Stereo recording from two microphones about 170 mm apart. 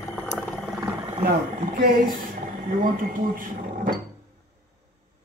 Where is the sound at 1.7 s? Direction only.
55° right (ahead or behind).